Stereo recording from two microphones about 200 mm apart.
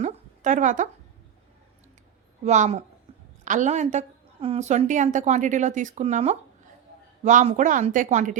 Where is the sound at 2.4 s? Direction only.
35° right (ahead or behind).